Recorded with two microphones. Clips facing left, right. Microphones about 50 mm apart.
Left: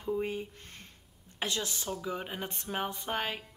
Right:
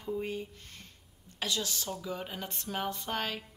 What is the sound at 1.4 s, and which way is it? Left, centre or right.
Speech, left.